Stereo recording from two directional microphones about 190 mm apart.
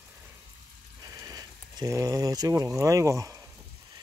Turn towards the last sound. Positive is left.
turn(degrees=-15)  # may be behind; listen again after turning